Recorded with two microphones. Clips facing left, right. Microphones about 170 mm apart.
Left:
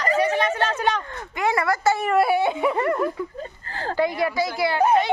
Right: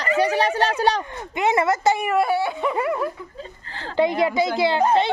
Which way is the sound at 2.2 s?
15° left (ahead or behind).